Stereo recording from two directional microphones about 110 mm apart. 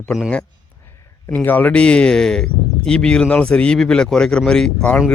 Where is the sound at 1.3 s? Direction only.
15° left (ahead or behind).